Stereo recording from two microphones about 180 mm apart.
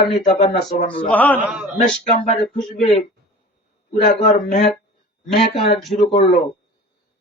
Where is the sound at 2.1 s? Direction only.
35° left (ahead or behind).